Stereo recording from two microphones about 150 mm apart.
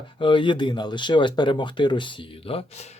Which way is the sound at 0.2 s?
35° left (ahead or behind).